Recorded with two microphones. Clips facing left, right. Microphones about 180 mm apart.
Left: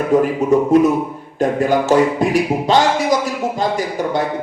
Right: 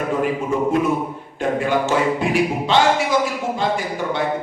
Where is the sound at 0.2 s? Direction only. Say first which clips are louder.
Left 6 dB; 40° left (ahead or behind).